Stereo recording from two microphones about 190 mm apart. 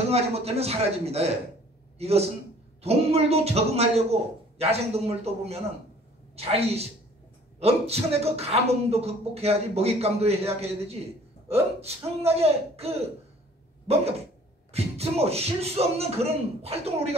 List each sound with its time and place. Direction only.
0.1 s a man's voice: 35° right (ahead or behind)